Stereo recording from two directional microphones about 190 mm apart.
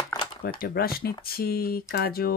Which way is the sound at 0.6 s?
55° left (ahead or behind).